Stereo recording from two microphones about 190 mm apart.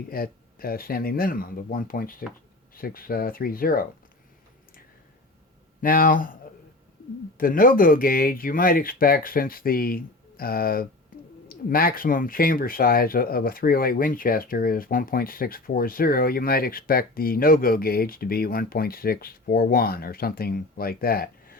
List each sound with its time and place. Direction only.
0.1 s speech: 50° left (ahead or behind)
5.8 s speech: 50° left (ahead or behind)
7.3 s speech: 50° left (ahead or behind)
11.1 s a sound: 45° left (ahead or behind)
11.4 s speech: 50° left (ahead or behind)